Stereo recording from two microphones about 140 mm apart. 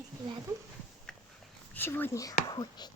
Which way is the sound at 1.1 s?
5° left (ahead or behind).